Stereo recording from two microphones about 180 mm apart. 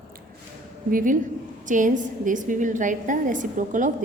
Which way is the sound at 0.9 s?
50° right (ahead or behind).